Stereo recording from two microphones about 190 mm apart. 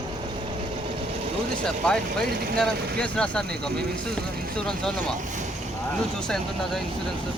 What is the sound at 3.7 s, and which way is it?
Speech, 55° right (ahead or behind).